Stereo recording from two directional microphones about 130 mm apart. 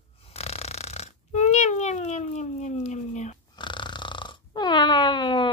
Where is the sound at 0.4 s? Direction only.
55° left (ahead or behind).